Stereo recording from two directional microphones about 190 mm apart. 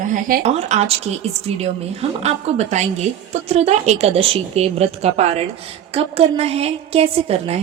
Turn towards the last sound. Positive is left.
turn(degrees=-30)  # may be behind; listen again after turning